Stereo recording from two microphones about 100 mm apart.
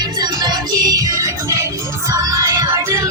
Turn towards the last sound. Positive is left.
turn(degrees=-35)  # may be behind; listen again after turning